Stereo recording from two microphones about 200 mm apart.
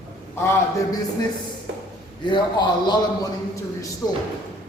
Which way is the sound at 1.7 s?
65° right (ahead or behind).